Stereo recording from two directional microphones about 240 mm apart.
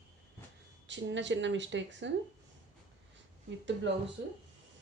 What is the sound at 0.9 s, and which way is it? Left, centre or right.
A woman's voice, right.